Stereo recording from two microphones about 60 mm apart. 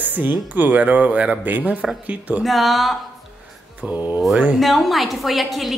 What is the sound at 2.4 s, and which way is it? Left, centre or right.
Speech, centre.